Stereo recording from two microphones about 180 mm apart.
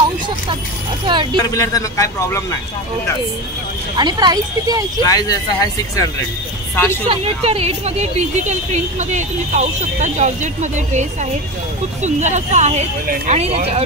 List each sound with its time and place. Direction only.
1.0 s speech: 25° right (ahead or behind)
1.4 s speech: 20° left (ahead or behind)
3.9 s speech: 25° right (ahead or behind)
5.0 s speech: 20° left (ahead or behind)
7.1 s speech: 35° right (ahead or behind)